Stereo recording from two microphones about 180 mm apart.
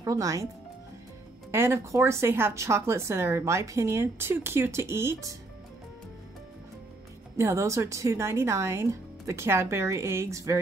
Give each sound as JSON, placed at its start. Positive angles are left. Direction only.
{"t": 0.0, "sound": "speech", "side_deg": -20}
{"t": 1.5, "sound": "a woman's voice", "side_deg": -15}
{"t": 7.3, "sound": "a woman's voice", "side_deg": -15}